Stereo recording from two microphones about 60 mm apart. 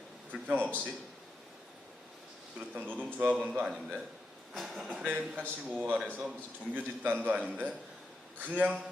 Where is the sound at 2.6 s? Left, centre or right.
Right.